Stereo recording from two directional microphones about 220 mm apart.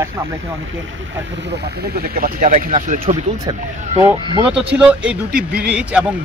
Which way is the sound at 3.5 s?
20° right (ahead or behind).